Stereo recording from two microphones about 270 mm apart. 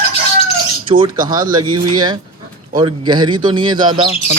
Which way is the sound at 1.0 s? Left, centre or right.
Centre.